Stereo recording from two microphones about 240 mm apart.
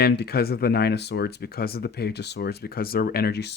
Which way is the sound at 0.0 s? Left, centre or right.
Left.